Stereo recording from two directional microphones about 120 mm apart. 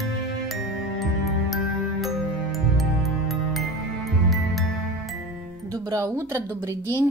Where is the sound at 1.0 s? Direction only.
Centre (ahead or behind).